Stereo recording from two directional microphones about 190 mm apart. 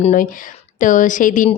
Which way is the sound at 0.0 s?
40° left (ahead or behind).